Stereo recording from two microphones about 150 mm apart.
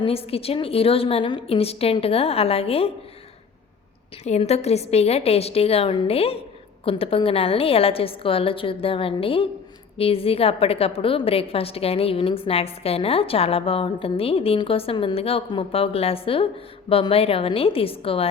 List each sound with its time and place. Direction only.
0.0 s a woman's voice: 40° left (ahead or behind)
4.2 s a woman's voice: 45° left (ahead or behind)